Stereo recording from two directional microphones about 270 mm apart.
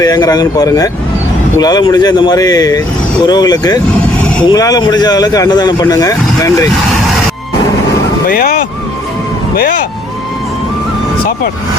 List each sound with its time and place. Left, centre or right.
0.0 s speech: centre
8.3 s speech: left